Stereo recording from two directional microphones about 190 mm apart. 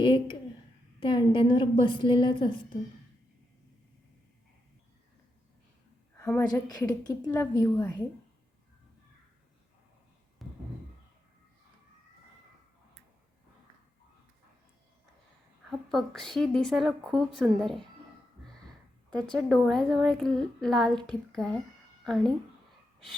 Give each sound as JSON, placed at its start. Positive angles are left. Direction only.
{"t": 0.0, "sound": "a woman's voice", "side_deg": 25}
{"t": 6.4, "sound": "a woman's voice", "side_deg": 20}
{"t": 10.4, "sound": "a sound", "side_deg": 0}
{"t": 15.9, "sound": "a woman's voice", "side_deg": 0}
{"t": 19.3, "sound": "a woman's voice", "side_deg": 5}